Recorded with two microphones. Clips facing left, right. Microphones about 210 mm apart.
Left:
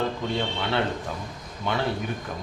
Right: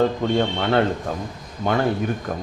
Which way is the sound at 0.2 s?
45° right (ahead or behind).